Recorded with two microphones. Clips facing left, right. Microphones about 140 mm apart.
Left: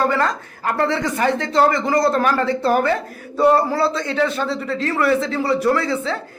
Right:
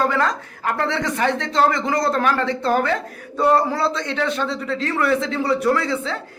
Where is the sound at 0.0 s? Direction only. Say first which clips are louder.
Left 1 dB; centre (ahead or behind).